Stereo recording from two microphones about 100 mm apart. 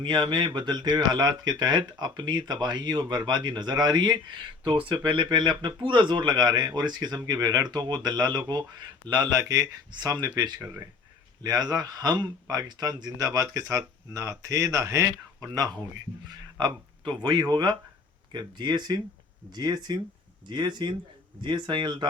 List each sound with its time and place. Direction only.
0.0 s speech: 50° right (ahead or behind)
9.4 s speech: 35° right (ahead or behind)
16.3 s a sound: 45° right (ahead or behind)
17.2 s speech: 45° right (ahead or behind)